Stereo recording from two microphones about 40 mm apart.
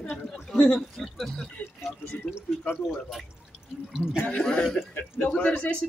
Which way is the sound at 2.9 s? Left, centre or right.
Centre.